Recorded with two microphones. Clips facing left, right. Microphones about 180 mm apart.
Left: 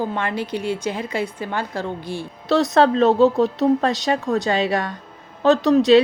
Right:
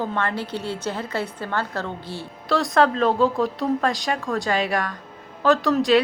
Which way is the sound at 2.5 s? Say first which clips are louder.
Left 3 dB; 25° left (ahead or behind).